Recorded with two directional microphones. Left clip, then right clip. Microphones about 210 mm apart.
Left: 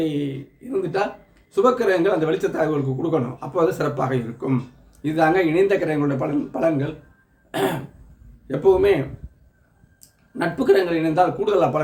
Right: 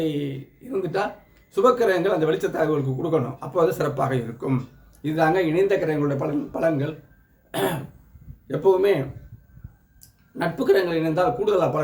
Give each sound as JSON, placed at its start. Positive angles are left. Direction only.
{"t": 0.0, "sound": "a man's voice", "side_deg": -5}
{"t": 7.5, "sound": "cough", "side_deg": 10}
{"t": 8.4, "sound": "speech", "side_deg": 10}
{"t": 10.3, "sound": "speech", "side_deg": 10}